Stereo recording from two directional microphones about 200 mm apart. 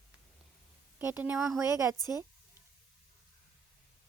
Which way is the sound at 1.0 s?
10° right (ahead or behind).